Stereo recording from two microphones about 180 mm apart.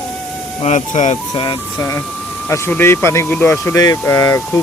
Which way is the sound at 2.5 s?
15° left (ahead or behind).